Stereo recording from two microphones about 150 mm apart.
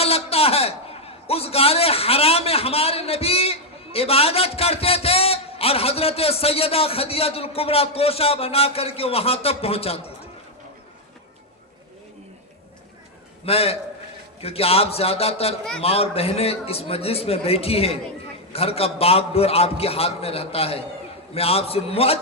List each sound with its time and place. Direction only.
0.0 s a man's voice: 40° left (ahead or behind)
13.4 s a man's voice: 40° left (ahead or behind)